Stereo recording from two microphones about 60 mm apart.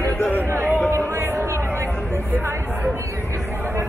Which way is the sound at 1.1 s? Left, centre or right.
Right.